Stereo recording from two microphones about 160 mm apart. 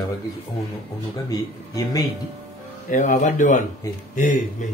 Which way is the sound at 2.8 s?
55° left (ahead or behind).